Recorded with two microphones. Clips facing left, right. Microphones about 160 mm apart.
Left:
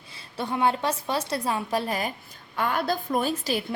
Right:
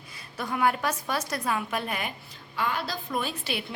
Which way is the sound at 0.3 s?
25° left (ahead or behind).